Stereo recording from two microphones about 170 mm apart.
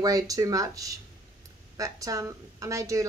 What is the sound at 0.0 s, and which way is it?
A woman's voice, 20° right (ahead or behind).